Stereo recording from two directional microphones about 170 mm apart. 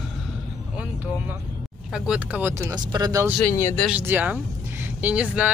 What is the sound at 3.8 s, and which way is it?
Speech, 10° right (ahead or behind).